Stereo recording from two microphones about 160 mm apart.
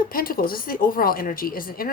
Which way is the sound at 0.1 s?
65° left (ahead or behind).